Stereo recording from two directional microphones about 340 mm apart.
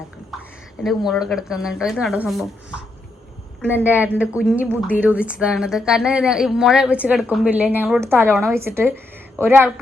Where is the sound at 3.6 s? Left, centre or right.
Centre.